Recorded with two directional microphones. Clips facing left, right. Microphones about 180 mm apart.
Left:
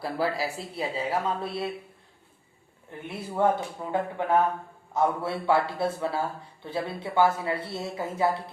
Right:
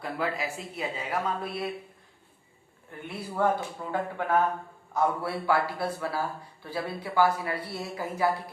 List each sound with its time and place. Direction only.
0.0 s speech: 35° left (ahead or behind)
2.9 s a man's voice: 20° left (ahead or behind)